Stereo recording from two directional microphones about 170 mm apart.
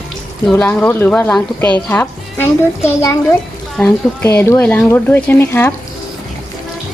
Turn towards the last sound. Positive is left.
turn(degrees=15)  # may be behind; listen again after turning